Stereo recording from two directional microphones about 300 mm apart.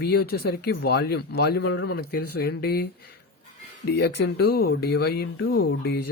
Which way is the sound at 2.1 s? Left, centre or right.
Left.